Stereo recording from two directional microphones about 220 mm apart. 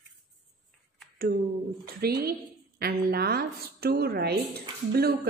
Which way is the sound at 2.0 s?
45° right (ahead or behind).